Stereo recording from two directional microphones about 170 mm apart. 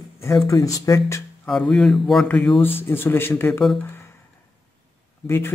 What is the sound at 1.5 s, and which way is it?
Speech, 5° left (ahead or behind).